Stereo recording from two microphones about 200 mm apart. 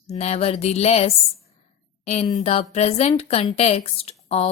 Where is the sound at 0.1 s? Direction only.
30° left (ahead or behind).